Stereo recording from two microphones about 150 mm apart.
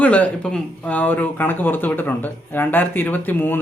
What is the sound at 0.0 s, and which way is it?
Speech, 10° left (ahead or behind).